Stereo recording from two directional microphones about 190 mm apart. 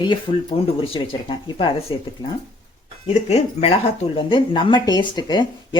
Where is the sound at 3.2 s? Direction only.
35° left (ahead or behind).